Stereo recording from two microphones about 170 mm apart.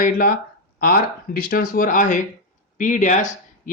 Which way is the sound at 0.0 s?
55° left (ahead or behind).